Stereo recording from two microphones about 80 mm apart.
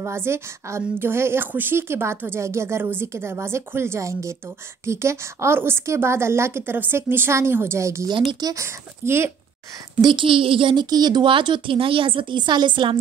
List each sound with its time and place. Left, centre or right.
0.0 s a woman's voice: right
8.1 s speech: right
8.5 s a woman's voice: right
10.0 s a woman's voice: right